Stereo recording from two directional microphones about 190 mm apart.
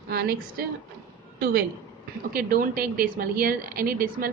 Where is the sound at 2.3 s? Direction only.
50° right (ahead or behind).